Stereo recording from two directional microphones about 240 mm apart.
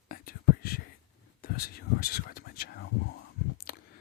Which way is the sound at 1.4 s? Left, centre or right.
Left.